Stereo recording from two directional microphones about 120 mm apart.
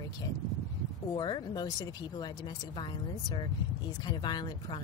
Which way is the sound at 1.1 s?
40° left (ahead or behind).